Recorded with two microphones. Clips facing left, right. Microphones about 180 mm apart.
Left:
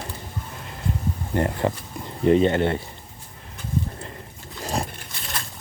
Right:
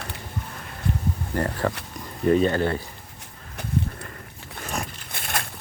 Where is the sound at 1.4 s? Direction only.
20° left (ahead or behind).